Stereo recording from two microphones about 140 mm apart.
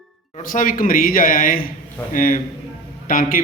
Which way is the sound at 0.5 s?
75° left (ahead or behind).